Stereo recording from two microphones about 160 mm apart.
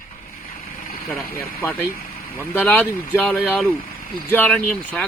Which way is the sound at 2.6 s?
10° left (ahead or behind).